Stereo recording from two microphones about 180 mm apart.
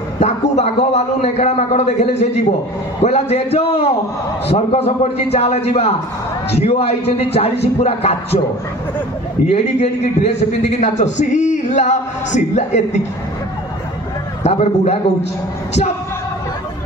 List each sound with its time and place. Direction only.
0.2 s a man's voice: 40° left (ahead or behind)
9.5 s a man's voice: 40° left (ahead or behind)
14.4 s a man's voice: 35° left (ahead or behind)